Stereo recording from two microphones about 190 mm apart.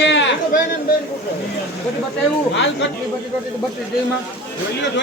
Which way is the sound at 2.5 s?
70° left (ahead or behind).